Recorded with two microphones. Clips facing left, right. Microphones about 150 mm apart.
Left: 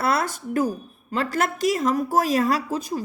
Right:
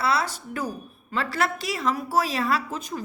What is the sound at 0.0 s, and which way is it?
Speech, 50° left (ahead or behind).